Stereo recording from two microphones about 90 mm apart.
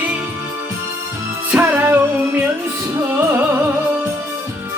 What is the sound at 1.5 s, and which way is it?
Music, 20° right (ahead or behind).